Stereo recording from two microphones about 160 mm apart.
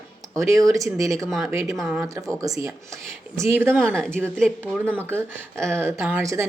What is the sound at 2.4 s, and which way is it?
Speech, 20° right (ahead or behind).